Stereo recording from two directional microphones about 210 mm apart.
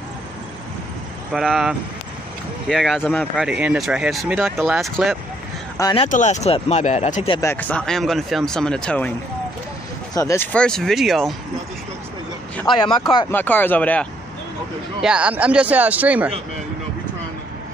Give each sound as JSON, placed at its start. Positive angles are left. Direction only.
{"t": 1.3, "sound": "speech", "side_deg": 0}
{"t": 3.4, "sound": "speech", "side_deg": -5}
{"t": 5.8, "sound": "speech", "side_deg": 20}
{"t": 6.0, "sound": "speech", "side_deg": 35}
{"t": 7.3, "sound": "speech", "side_deg": 10}
{"t": 10.1, "sound": "speech", "side_deg": 15}
{"t": 12.7, "sound": "speech", "side_deg": 20}
{"t": 13.3, "sound": "speech", "side_deg": 10}
{"t": 15.0, "sound": "speech", "side_deg": -5}